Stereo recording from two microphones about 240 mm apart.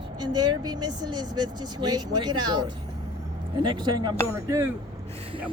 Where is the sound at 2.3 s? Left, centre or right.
Right.